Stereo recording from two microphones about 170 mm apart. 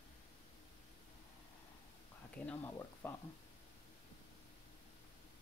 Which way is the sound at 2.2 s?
10° left (ahead or behind).